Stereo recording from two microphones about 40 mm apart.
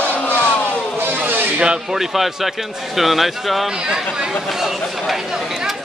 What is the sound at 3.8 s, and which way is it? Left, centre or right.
Speech, centre.